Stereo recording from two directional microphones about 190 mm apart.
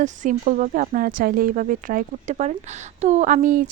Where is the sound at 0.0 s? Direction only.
40° right (ahead or behind).